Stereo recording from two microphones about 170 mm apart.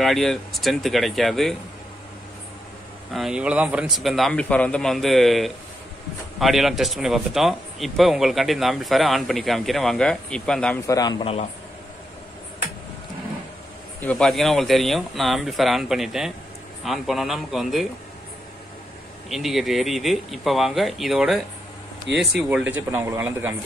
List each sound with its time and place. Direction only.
0.0 s speech: centre (ahead or behind)
3.1 s speech: centre (ahead or behind)
10.9 s a man's voice: 25° left (ahead or behind)
14.0 s speech: 5° left (ahead or behind)
19.2 s speech: centre (ahead or behind)